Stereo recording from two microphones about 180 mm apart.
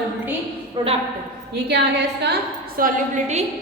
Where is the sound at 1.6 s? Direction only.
70° right (ahead or behind).